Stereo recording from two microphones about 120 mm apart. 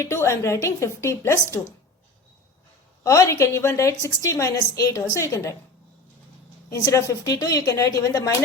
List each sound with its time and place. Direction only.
0.0 s speech: 25° left (ahead or behind)
3.0 s speech: 25° left (ahead or behind)
6.7 s speech: 25° left (ahead or behind)